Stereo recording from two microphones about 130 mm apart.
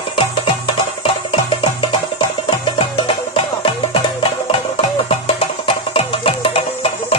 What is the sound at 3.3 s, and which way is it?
Music, 45° left (ahead or behind).